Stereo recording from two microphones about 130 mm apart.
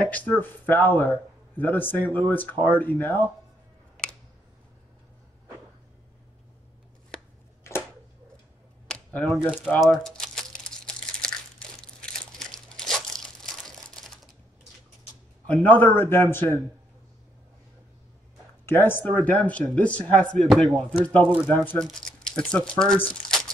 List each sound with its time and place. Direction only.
0.0 s a man's voice: 10° left (ahead or behind)
7.7 s a sound: 20° left (ahead or behind)
8.8 s speech: 10° left (ahead or behind)
9.8 s crumpling: 5° left (ahead or behind)
13.9 s typing: centre (ahead or behind)
15.4 s a man's voice: 10° left (ahead or behind)
18.7 s a man's voice: 15° left (ahead or behind)